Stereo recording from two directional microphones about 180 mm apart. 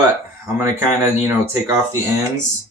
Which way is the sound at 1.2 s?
15° right (ahead or behind).